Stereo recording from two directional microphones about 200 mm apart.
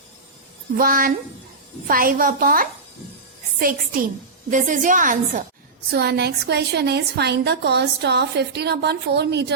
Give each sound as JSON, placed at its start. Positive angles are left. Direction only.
{"t": 0.8, "sound": "a woman's voice", "side_deg": -45}
{"t": 5.9, "sound": "a woman's voice", "side_deg": -55}